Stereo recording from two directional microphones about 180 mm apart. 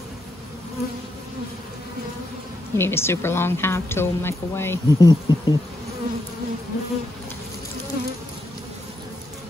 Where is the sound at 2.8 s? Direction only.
15° left (ahead or behind).